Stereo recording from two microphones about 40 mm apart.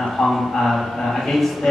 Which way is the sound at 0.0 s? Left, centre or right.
Centre.